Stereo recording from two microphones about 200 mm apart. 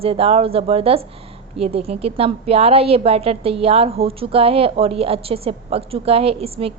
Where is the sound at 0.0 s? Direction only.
30° right (ahead or behind).